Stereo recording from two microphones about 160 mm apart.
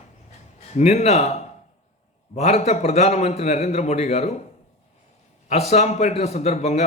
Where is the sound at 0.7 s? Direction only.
45° left (ahead or behind).